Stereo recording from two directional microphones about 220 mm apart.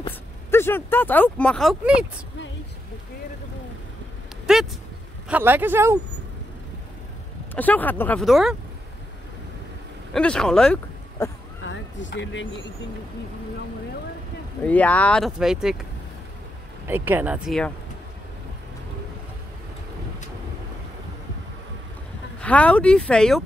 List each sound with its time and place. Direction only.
0.5 s speech: 10° left (ahead or behind)
4.5 s a sound: centre (ahead or behind)
5.3 s speech: 10° right (ahead or behind)
7.5 s speech: 5° left (ahead or behind)
10.1 s speech: 5° left (ahead or behind)
11.6 s speech: 55° left (ahead or behind)
14.6 s speech: 5° left (ahead or behind)
16.8 s speech: 10° right (ahead or behind)
22.4 s speech: 5° left (ahead or behind)